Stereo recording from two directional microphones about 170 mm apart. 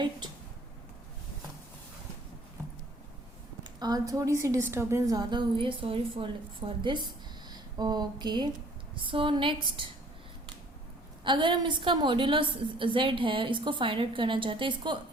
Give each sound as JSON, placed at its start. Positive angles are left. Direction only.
{"t": 3.6, "sound": "a woman's voice", "side_deg": -25}
{"t": 11.2, "sound": "a woman's voice", "side_deg": -30}